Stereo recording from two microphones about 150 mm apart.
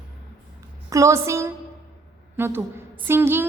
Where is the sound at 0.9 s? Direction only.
20° right (ahead or behind).